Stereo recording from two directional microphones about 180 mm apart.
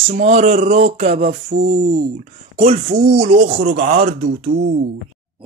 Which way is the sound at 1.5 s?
75° right (ahead or behind).